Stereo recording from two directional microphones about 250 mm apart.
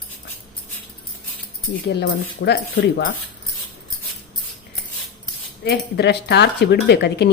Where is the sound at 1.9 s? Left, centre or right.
Left.